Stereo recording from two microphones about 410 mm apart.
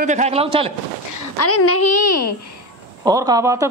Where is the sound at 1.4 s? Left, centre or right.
Left.